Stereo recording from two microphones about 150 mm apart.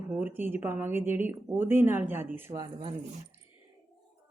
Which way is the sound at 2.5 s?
35° right (ahead or behind).